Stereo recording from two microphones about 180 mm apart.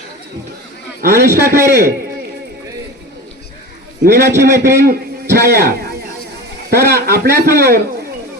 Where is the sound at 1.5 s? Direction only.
15° right (ahead or behind).